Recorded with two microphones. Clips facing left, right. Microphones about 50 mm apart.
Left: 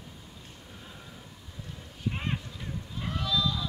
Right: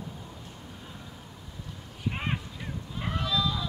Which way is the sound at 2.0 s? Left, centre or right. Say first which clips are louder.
Right 1 dB; centre.